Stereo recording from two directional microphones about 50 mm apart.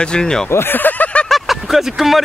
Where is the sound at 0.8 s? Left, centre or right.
Left.